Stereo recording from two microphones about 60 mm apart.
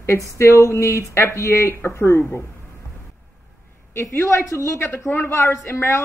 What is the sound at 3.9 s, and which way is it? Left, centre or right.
Speech, left.